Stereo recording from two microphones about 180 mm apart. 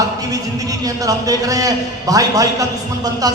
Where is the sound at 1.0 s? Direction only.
20° right (ahead or behind).